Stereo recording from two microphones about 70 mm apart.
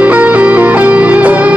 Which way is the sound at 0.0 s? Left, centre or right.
Right.